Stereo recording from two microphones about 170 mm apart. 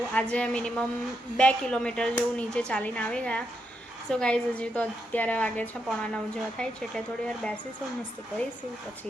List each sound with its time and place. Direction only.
0.1 s a woman's voice: 5° left (ahead or behind)